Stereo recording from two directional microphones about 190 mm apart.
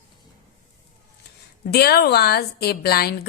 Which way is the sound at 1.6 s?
55° left (ahead or behind).